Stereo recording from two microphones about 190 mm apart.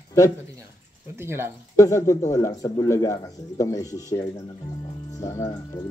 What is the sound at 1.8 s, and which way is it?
Speech, 15° left (ahead or behind).